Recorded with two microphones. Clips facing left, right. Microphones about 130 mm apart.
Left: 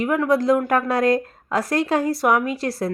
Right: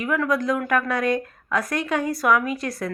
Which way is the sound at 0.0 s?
30° left (ahead or behind).